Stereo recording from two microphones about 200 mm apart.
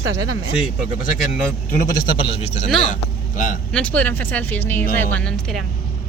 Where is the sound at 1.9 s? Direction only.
25° left (ahead or behind); by 3.6 s 40° left (ahead or behind).